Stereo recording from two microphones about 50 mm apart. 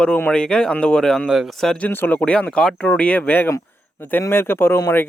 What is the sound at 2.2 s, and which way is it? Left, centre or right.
Speech, left.